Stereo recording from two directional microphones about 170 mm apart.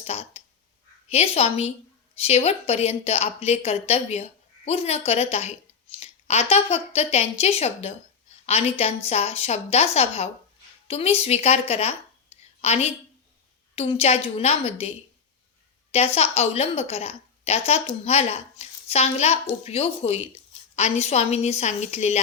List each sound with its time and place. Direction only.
0.0 s clicking: 40° left (ahead or behind)
1.1 s speech: 35° left (ahead or behind)